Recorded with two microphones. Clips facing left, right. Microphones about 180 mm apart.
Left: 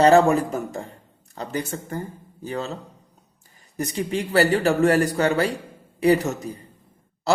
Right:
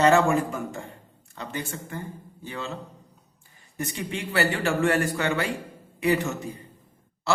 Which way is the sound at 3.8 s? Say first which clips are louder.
Left 6 dB; 35° left (ahead or behind).